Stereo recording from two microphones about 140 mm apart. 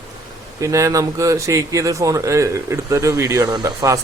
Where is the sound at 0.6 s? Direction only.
25° right (ahead or behind).